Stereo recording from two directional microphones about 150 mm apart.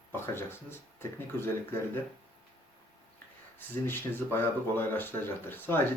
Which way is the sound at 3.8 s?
15° left (ahead or behind).